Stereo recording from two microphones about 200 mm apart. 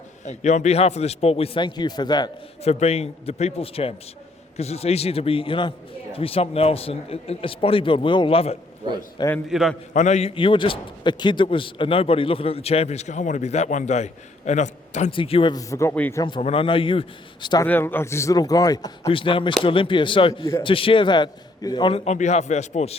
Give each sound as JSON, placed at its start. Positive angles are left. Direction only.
{"t": 0.3, "sound": "a man's voice", "side_deg": 35}
{"t": 2.7, "sound": "a man's voice", "side_deg": 30}
{"t": 9.3, "sound": "a man's voice", "side_deg": 0}
{"t": 9.9, "sound": "a man's voice", "side_deg": 35}
{"t": 16.2, "sound": "a man's voice", "side_deg": 25}
{"t": 17.7, "sound": "a man's voice", "side_deg": 10}